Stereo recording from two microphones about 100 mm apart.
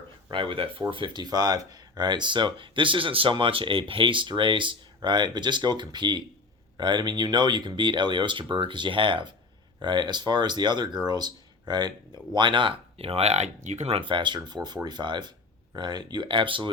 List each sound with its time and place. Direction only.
0.3 s speech: 55° right (ahead or behind)